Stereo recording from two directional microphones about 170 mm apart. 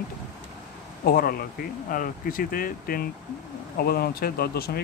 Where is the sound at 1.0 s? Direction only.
60° left (ahead or behind).